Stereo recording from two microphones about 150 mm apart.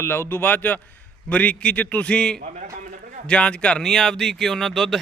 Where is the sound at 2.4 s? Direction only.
50° right (ahead or behind).